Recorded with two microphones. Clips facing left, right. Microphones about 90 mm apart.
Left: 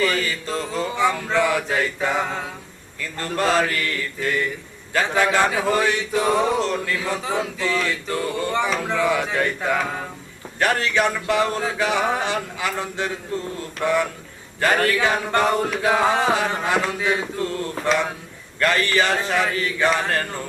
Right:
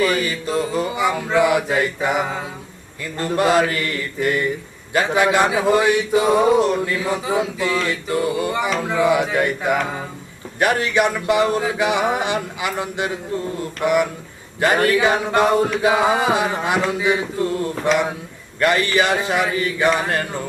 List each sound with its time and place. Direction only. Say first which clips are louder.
0.0 s speech: right 3 dB; 15° right (ahead or behind)
10.6 s speech: right 3 dB; 15° right (ahead or behind)